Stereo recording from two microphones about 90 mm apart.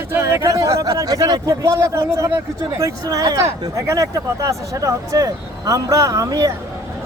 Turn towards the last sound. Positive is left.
turn(degrees=-40)  # may be behind; listen again after turning